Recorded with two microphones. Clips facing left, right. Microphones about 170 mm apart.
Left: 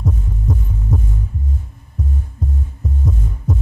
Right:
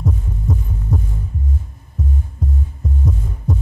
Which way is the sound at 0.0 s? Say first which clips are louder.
Even; centre (ahead or behind).